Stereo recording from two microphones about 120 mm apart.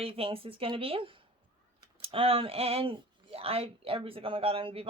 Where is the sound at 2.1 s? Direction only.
50° right (ahead or behind).